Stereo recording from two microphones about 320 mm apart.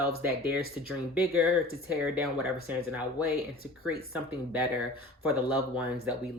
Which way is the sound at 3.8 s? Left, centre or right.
Centre.